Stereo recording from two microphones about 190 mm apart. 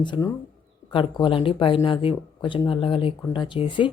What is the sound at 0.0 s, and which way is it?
Speech, 25° left (ahead or behind).